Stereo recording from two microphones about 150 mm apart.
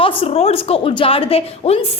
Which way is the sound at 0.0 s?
40° left (ahead or behind).